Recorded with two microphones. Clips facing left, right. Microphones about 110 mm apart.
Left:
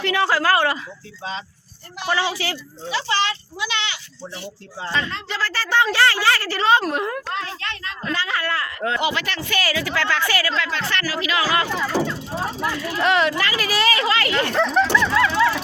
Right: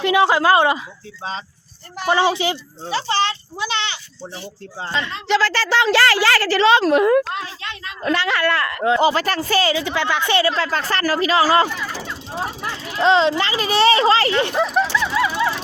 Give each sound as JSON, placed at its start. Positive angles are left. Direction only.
{"t": 0.0, "sound": "speech", "side_deg": -20}
{"t": 2.0, "sound": "speech", "side_deg": -25}
{"t": 2.9, "sound": "speech", "side_deg": -30}
{"t": 5.3, "sound": "a woman's voice", "side_deg": -90}
{"t": 7.3, "sound": "a child's voice", "side_deg": -10}
{"t": 8.0, "sound": "speech", "side_deg": -70}
{"t": 9.0, "sound": "speech", "side_deg": -35}
{"t": 10.6, "sound": "speech", "side_deg": -40}
{"t": 12.0, "sound": "vehicle", "side_deg": -15}
{"t": 12.7, "sound": "speech", "side_deg": -25}
{"t": 14.5, "sound": "a child's voice", "side_deg": -5}
{"t": 14.9, "sound": "a sound", "side_deg": -10}